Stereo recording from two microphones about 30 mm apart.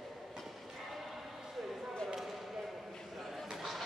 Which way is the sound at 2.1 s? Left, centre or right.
Centre.